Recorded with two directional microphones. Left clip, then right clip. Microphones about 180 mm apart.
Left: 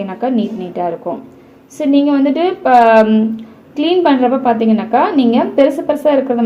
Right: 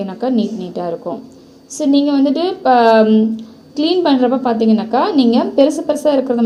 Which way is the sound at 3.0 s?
20° left (ahead or behind).